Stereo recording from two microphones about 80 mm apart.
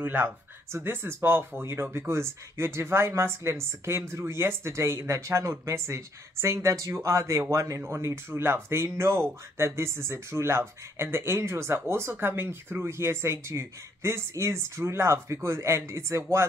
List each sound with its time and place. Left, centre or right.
0.0 s speech: right